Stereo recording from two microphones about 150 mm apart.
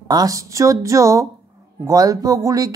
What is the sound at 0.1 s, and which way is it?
A woman's voice, 25° right (ahead or behind).